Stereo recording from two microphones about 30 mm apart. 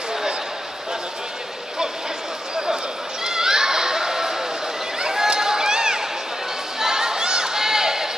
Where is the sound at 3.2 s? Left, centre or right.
Centre.